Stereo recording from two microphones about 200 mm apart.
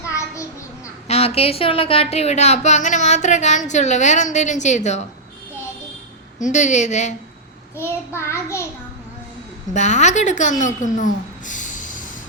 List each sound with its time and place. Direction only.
0.0 s a sound: 15° left (ahead or behind)
1.0 s a woman's voice: 30° left (ahead or behind)
6.4 s a woman's voice: 35° left (ahead or behind)
7.8 s a child's voice: 15° left (ahead or behind)
9.7 s a woman's voice: 35° left (ahead or behind)
10.6 s a sound: 40° left (ahead or behind)